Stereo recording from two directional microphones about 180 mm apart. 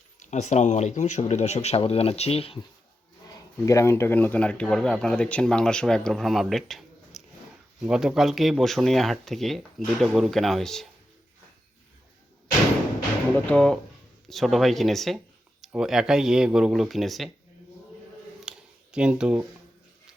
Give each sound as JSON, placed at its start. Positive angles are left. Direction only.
{"t": 0.2, "sound": "speech", "side_deg": 40}
{"t": 3.3, "sound": "speech", "side_deg": 15}
{"t": 13.3, "sound": "speech", "side_deg": 5}
{"t": 18.4, "sound": "a sound", "side_deg": -5}